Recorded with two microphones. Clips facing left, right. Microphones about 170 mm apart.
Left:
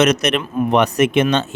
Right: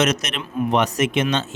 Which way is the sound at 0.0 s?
60° left (ahead or behind).